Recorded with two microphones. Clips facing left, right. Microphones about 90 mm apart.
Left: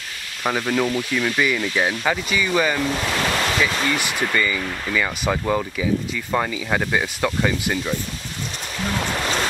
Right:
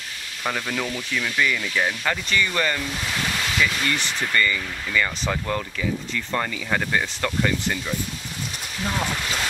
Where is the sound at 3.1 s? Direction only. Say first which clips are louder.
Left 5 dB; 70° left (ahead or behind).